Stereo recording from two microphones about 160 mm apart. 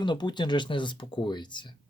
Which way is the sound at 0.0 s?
30° left (ahead or behind).